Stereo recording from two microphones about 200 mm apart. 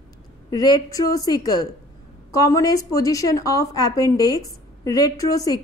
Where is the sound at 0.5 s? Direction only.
20° left (ahead or behind).